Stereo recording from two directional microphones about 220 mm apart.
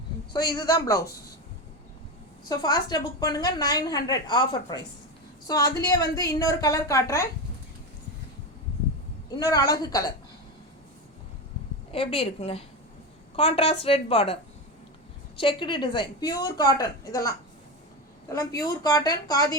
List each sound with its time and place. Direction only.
0.3 s a woman's voice: 20° left (ahead or behind)
2.5 s a woman's voice: 20° left (ahead or behind)
9.4 s a woman's voice: 15° left (ahead or behind)
11.9 s a woman's voice: 25° left (ahead or behind)
15.4 s a woman's voice: 20° left (ahead or behind)